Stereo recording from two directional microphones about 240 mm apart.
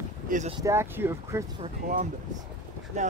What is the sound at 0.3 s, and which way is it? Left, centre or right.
Speech, right.